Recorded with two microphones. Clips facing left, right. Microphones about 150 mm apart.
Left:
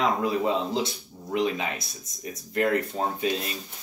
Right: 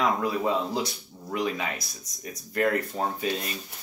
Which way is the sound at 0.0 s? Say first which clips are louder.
Left 1 dB; 25° left (ahead or behind).